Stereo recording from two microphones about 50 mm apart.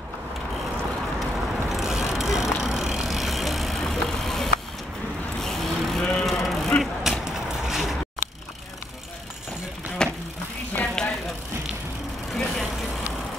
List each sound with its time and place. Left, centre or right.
1.3 s vehicle: centre
6.2 s a sound: centre
10.0 s vehicle: centre
12.3 s vehicle: centre